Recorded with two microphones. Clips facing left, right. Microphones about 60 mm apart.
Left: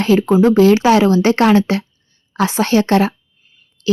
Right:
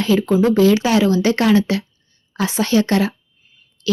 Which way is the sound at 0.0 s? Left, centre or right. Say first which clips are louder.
Left 3 dB; left.